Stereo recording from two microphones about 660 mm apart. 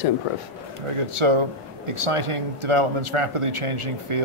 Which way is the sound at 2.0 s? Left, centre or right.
Right.